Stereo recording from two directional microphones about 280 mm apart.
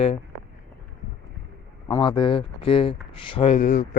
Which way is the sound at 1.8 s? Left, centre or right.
Centre.